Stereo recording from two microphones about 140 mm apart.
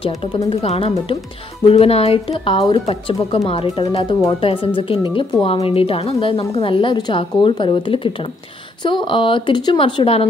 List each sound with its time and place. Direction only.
0.5 s a woman's voice: 45° left (ahead or behind)